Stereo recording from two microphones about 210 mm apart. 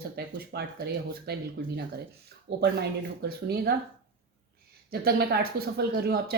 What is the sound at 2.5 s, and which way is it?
Speech, 55° right (ahead or behind).